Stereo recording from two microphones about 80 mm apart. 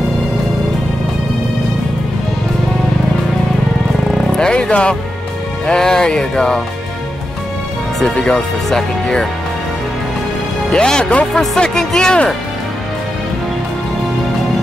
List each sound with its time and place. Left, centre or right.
4.3 s speech: centre
8.0 s speech: centre
10.7 s speech: centre